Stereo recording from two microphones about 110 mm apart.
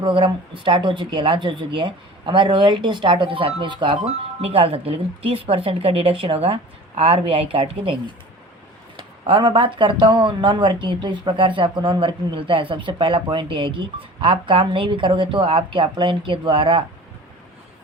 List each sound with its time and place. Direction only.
0.0 s speech: 50° right (ahead or behind)
4.4 s speech: 60° right (ahead or behind)
9.0 s speech: 50° right (ahead or behind)